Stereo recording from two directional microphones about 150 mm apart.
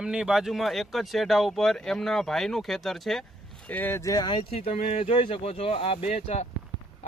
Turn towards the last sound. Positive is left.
turn(degrees=45)  # may be behind; listen again after turning